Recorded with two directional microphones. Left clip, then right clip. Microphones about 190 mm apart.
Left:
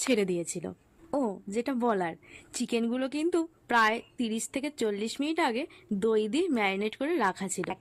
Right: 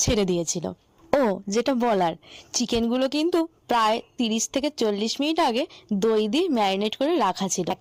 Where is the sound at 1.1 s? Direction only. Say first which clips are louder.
Right 10 dB; 40° right (ahead or behind).